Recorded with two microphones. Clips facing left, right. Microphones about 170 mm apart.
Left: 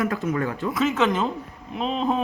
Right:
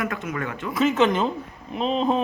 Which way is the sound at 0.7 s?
Centre (ahead or behind).